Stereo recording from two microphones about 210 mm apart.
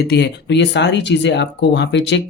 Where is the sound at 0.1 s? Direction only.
55° left (ahead or behind).